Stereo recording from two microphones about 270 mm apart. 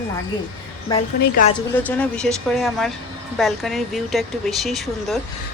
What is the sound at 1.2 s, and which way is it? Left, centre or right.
Speech, left.